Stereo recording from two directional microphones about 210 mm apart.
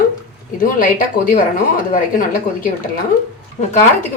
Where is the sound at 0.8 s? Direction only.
40° left (ahead or behind).